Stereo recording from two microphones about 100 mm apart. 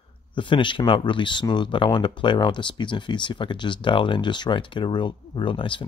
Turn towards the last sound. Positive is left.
turn(degrees=55)  # may be behind; listen again after turning